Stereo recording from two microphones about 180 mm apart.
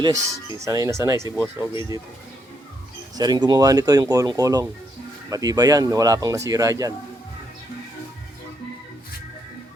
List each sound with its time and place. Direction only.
0.3 s speech: 20° right (ahead or behind)
3.2 s speech: 20° right (ahead or behind)